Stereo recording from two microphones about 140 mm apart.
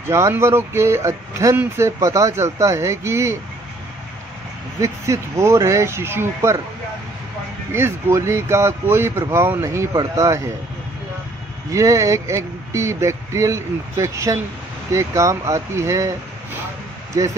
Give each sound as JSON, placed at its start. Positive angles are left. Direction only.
{"t": 0.1, "sound": "speech", "side_deg": -20}
{"t": 4.8, "sound": "speech", "side_deg": -20}
{"t": 7.7, "sound": "speech", "side_deg": -15}
{"t": 11.7, "sound": "speech", "side_deg": -25}